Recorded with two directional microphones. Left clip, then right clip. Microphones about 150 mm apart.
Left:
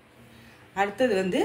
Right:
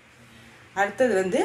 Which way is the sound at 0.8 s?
30° right (ahead or behind).